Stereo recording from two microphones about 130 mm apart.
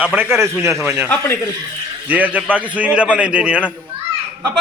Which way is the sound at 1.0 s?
15° left (ahead or behind).